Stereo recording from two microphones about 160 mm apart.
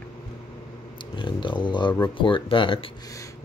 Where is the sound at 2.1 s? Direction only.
30° left (ahead or behind).